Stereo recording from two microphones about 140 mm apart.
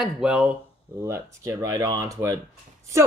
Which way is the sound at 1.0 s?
20° right (ahead or behind).